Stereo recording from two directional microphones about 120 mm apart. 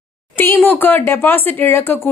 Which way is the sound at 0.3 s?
20° left (ahead or behind).